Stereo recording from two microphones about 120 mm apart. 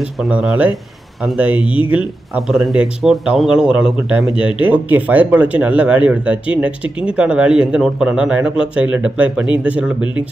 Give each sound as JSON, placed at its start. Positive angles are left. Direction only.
{"t": 0.0, "sound": "speech", "side_deg": -5}
{"t": 1.5, "sound": "speech", "side_deg": 45}
{"t": 1.9, "sound": "speech", "side_deg": -10}